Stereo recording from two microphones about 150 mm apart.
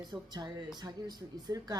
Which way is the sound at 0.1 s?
25° right (ahead or behind).